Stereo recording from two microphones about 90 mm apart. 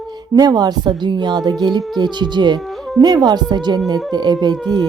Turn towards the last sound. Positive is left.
turn(degrees=-50)  # may be behind; listen again after turning